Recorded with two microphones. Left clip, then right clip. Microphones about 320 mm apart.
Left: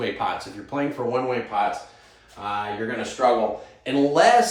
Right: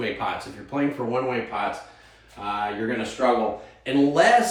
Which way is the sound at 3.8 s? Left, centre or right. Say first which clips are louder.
Left 1 dB; centre.